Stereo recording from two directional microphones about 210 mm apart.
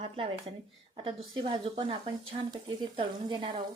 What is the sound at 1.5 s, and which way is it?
Speech, 25° right (ahead or behind).